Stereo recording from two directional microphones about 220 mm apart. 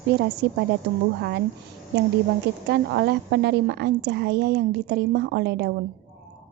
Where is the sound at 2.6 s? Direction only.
50° right (ahead or behind).